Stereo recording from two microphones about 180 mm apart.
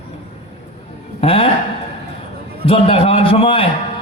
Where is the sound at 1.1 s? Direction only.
30° left (ahead or behind).